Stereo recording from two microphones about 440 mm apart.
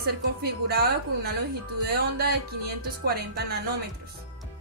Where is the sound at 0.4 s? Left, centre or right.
Right.